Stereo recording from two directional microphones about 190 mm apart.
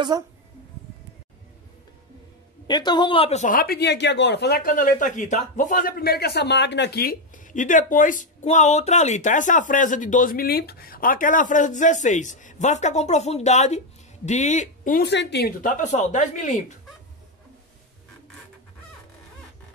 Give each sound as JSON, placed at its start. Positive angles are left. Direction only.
{"t": 2.6, "sound": "speech", "side_deg": 20}
{"t": 15.0, "sound": "a woman's voice", "side_deg": 60}
{"t": 15.6, "sound": "speech", "side_deg": 40}